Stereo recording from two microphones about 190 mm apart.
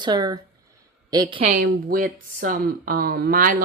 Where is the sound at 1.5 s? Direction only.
45° right (ahead or behind).